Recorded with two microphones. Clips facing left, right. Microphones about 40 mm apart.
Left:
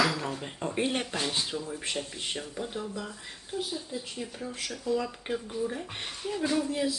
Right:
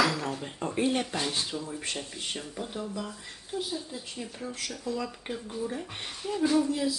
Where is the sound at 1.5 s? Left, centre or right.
Centre.